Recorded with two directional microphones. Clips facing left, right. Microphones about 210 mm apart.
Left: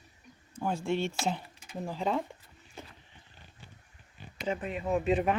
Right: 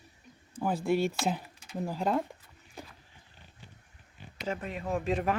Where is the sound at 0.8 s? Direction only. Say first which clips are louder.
Right 4 dB; centre (ahead or behind).